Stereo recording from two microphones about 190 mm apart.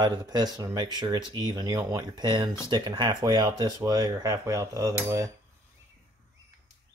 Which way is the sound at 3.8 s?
20° right (ahead or behind).